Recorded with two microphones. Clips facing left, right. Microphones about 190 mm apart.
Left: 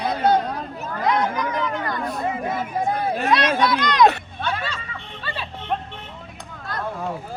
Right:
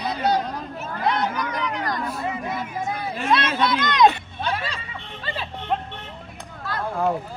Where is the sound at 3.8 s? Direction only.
20° right (ahead or behind).